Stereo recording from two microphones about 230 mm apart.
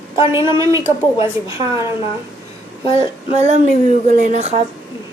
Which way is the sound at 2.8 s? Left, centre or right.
Left.